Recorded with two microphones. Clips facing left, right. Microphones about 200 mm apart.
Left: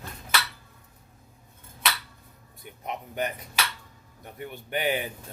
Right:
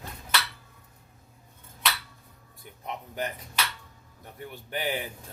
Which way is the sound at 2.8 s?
20° left (ahead or behind).